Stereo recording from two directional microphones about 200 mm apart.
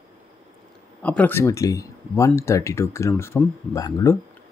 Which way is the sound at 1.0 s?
10° left (ahead or behind).